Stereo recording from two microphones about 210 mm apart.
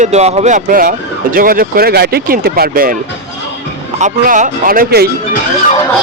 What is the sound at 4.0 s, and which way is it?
Speech, 35° right (ahead or behind).